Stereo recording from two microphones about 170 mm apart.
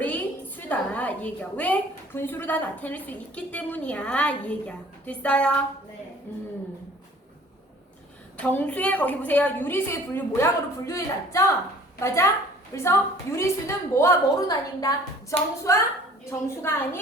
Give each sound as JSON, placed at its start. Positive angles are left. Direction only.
{"t": 0.0, "sound": "a woman's voice", "side_deg": 10}
{"t": 8.4, "sound": "a woman's voice", "side_deg": 10}